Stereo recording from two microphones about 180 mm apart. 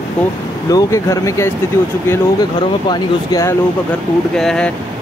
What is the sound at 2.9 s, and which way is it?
Speech, 20° left (ahead or behind).